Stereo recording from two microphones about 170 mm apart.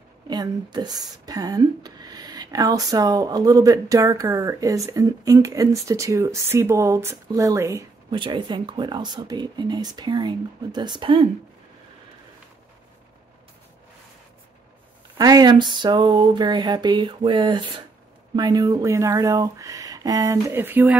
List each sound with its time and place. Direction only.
0.3 s speech: 25° right (ahead or behind)
8.2 s speech: 25° right (ahead or behind)
15.1 s speech: 20° right (ahead or behind)